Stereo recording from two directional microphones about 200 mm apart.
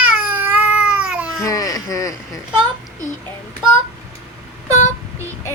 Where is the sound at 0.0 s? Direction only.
10° right (ahead or behind).